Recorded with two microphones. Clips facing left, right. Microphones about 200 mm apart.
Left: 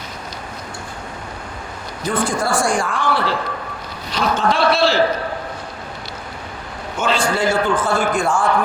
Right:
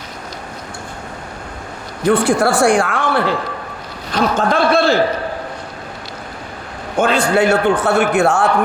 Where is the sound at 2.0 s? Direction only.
70° right (ahead or behind).